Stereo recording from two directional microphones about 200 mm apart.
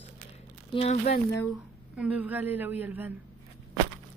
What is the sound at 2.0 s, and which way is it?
A woman's voice, 5° right (ahead or behind).